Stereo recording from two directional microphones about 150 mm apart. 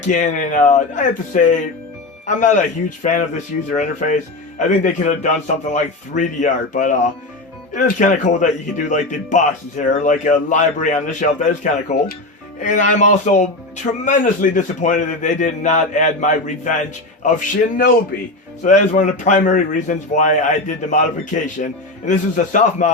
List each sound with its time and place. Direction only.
0.0 s speech: 55° left (ahead or behind)
18.6 s speech: 55° left (ahead or behind)